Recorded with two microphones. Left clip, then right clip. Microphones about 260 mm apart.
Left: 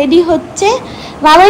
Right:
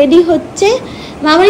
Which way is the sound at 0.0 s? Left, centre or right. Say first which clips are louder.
Right 1 dB; centre.